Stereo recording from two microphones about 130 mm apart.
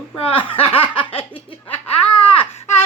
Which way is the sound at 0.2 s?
45° left (ahead or behind).